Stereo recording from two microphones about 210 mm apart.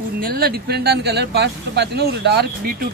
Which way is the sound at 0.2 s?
45° right (ahead or behind).